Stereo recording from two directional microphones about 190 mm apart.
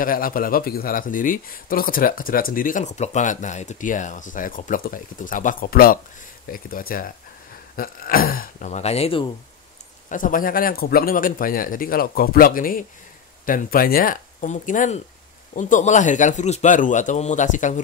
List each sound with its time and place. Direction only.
0.0 s speech: 50° left (ahead or behind); by 9.3 s 30° left (ahead or behind)
10.0 s a man's voice: 45° left (ahead or behind)